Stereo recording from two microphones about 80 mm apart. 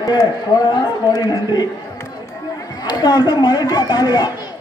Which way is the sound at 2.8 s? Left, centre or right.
Left.